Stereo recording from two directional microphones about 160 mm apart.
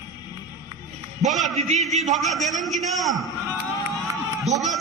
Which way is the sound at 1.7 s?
45° right (ahead or behind).